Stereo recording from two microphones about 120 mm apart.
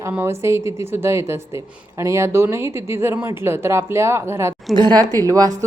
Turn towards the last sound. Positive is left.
turn(degrees=-30)  # may be behind; listen again after turning